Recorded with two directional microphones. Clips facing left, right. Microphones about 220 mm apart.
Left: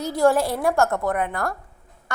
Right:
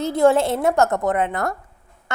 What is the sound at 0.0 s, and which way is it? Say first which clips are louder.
A woman's voice: right 3 dB; 25° right (ahead or behind).